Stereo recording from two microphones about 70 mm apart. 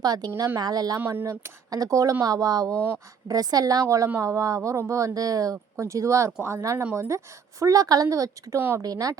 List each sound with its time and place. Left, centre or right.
0.0 s speech: right
0.3 s speech: right
0.6 s speech: right
0.9 s speech: right
1.7 s speech: right
2.2 s a woman's voice: right
3.8 s speech: right
7.6 s a woman's voice: right
8.0 s speech: right
8.5 s speech: right
8.8 s a woman's voice: right